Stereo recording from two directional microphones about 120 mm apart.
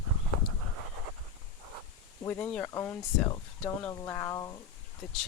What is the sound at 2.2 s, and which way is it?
Speech, 15° left (ahead or behind).